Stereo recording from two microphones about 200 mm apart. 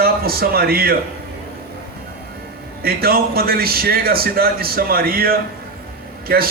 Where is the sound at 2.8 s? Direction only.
50° right (ahead or behind).